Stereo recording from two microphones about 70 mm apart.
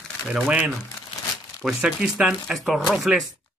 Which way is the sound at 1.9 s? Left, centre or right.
Centre.